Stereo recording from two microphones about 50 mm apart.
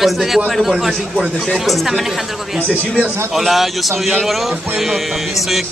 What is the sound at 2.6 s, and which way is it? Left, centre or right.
Speech, right.